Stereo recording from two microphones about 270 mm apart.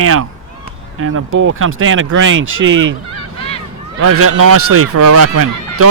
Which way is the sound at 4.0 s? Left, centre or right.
Right.